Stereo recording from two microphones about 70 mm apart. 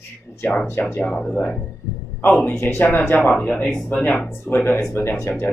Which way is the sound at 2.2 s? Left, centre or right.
Left.